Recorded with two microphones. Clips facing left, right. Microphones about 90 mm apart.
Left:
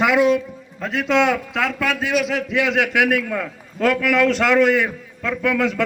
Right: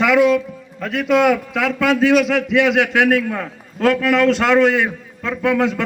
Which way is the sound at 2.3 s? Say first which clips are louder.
Right 5 dB; 75° right (ahead or behind).